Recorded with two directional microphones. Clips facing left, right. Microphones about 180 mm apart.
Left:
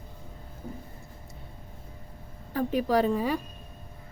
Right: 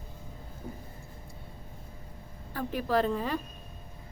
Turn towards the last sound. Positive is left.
turn(degrees=10)  # may be behind; listen again after turning